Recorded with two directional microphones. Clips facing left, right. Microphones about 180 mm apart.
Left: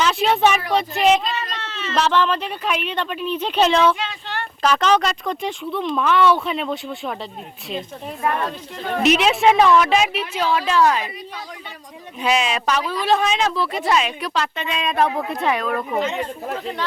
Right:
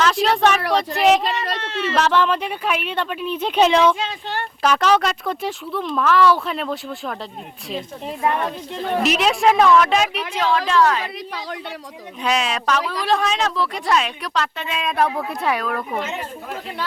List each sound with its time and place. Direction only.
0.0 s a sound: 5° left (ahead or behind)
1.8 s a woman's voice: 10° right (ahead or behind)
8.2 s speech: 20° right (ahead or behind)
9.0 s a woman's voice: centre (ahead or behind)
12.2 s a woman's voice: 5° left (ahead or behind)